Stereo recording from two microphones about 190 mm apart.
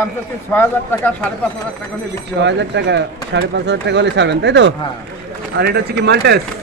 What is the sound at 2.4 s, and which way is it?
Speech, 65° right (ahead or behind).